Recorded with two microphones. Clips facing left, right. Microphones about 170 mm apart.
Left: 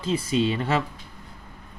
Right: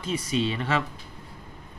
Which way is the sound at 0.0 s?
30° left (ahead or behind).